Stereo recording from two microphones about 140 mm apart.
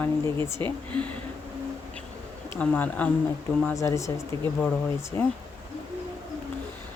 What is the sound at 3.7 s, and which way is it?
Speech, 20° left (ahead or behind).